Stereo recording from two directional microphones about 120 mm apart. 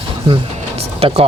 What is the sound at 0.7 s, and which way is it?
Vehicle, 55° right (ahead or behind).